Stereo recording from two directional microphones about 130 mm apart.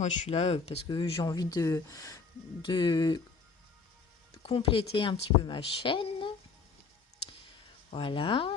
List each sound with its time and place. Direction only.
0.0 s speech: 55° left (ahead or behind)
0.9 s a woman's voice: 40° left (ahead or behind)
1.3 s speech: 30° left (ahead or behind)
4.4 s a woman's voice: 45° left (ahead or behind)
7.9 s a woman's voice: 40° left (ahead or behind)